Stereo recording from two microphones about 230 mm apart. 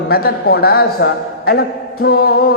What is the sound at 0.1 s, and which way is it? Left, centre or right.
A man's voice, left.